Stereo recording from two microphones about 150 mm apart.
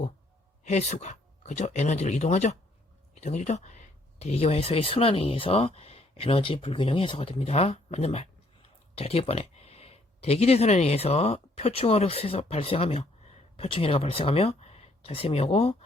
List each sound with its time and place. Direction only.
0.6 s speech: 50° left (ahead or behind)